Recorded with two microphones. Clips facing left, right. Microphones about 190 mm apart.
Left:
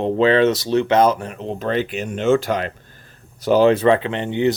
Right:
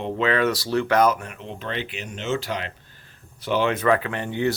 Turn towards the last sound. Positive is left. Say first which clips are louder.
# left 5 dB
turn(degrees=20)  # may be behind; listen again after turning